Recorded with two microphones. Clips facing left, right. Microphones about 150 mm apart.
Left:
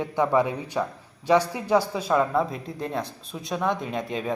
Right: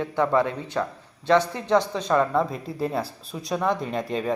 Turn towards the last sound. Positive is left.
turn(degrees=0)  # may be behind; listen again after turning